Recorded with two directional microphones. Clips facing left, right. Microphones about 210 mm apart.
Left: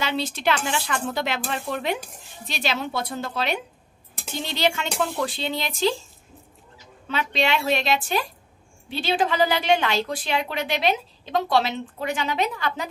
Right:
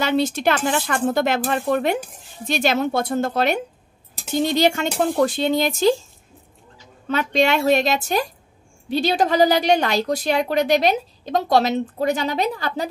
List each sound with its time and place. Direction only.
0.0 s speech: 45° right (ahead or behind)
7.1 s a woman's voice: 45° right (ahead or behind)